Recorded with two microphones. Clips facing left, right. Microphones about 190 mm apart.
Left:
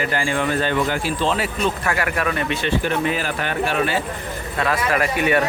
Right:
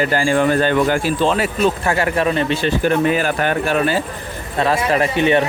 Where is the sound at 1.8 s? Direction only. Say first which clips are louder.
Right 5 dB; 25° right (ahead or behind).